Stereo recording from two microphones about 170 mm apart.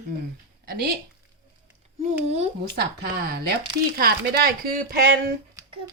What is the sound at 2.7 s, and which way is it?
Speech, 70° right (ahead or behind).